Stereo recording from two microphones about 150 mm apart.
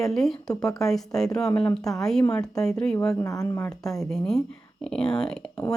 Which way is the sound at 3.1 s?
20° left (ahead or behind).